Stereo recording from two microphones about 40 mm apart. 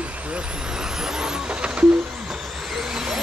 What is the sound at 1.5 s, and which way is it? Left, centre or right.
Music, right.